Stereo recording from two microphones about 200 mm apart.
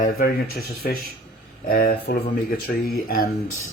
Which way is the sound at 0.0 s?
45° left (ahead or behind).